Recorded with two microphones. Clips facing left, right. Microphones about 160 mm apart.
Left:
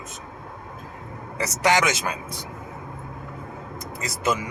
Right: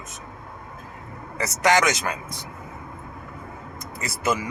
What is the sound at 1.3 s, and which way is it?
Speech, 15° left (ahead or behind).